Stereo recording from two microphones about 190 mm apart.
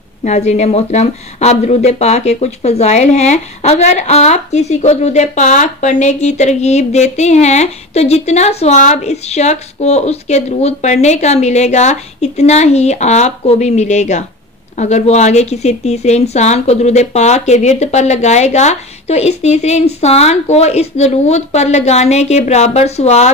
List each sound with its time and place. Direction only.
0.2 s speech: 35° left (ahead or behind)